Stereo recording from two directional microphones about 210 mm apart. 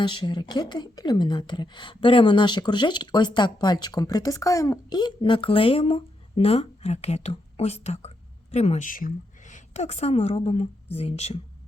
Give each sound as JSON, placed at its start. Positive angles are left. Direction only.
{"t": 0.0, "sound": "a woman's voice", "side_deg": 20}